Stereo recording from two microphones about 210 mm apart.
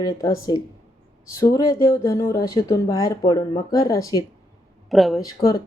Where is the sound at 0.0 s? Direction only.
15° left (ahead or behind).